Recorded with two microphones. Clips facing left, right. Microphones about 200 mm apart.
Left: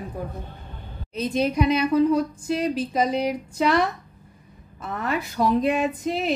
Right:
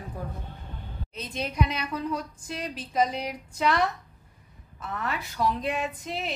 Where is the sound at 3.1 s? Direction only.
40° left (ahead or behind).